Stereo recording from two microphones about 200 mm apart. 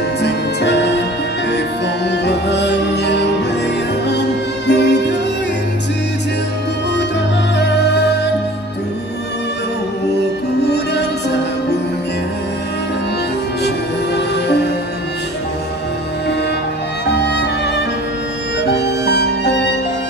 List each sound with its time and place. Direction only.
0.2 s music: 60° left (ahead or behind)
2.0 s music: 60° left (ahead or behind)
7.5 s music: 55° left (ahead or behind)
10.7 s music: 55° left (ahead or behind)
14.1 s music: 60° left (ahead or behind)
17.1 s music: 55° left (ahead or behind)
18.6 s music: 55° left (ahead or behind)